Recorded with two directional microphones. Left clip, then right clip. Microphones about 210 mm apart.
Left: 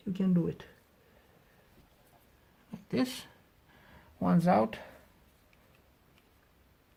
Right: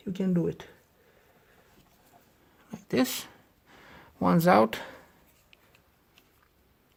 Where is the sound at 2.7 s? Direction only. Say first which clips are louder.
Right 6 dB; 30° right (ahead or behind).